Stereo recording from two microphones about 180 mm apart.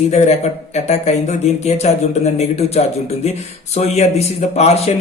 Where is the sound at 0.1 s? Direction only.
40° left (ahead or behind).